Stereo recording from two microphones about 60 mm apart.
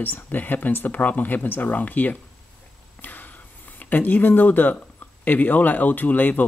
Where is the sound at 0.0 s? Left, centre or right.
Left.